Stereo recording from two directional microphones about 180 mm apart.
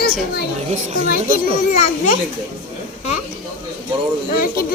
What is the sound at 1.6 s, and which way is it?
Speech, 45° left (ahead or behind).